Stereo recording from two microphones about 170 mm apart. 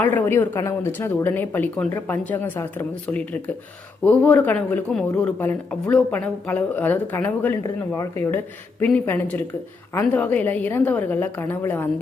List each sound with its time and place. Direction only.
0.0 s speech: 10° left (ahead or behind)